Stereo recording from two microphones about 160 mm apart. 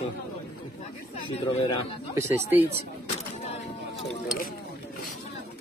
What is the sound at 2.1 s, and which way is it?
Speech, 10° right (ahead or behind).